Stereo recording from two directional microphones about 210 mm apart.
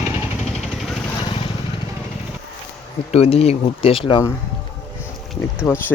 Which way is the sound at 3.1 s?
30° left (ahead or behind).